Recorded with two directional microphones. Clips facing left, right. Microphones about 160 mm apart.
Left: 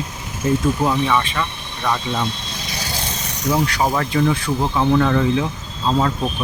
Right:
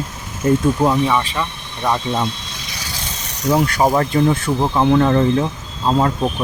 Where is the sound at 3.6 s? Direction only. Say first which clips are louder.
Right 4 dB; 45° right (ahead or behind).